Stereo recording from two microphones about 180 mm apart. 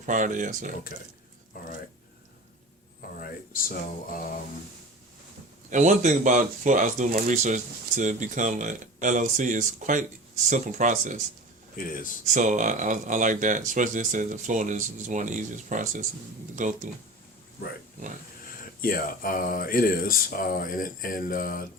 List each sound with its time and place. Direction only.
0.0 s speech: 45° right (ahead or behind)
3.2 s speech: 50° left (ahead or behind)
5.7 s speech: 40° right (ahead or behind)
11.8 s speech: 50° left (ahead or behind)
12.2 s speech: 45° right (ahead or behind)
18.8 s speech: 50° left (ahead or behind)